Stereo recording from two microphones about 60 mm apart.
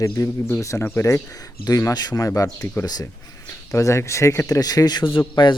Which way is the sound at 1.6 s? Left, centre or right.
Left.